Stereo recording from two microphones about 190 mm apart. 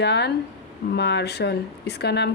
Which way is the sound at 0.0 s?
60° left (ahead or behind).